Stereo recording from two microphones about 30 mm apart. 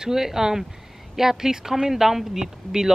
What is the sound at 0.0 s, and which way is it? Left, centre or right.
Speech, centre.